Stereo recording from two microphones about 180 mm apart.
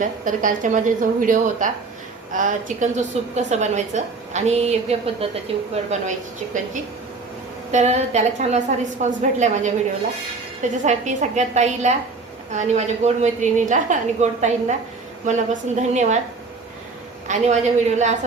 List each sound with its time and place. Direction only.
0.0 s a woman's voice: 45° right (ahead or behind)
7.7 s a woman's voice: 40° right (ahead or behind)
17.2 s a woman's voice: 40° right (ahead or behind)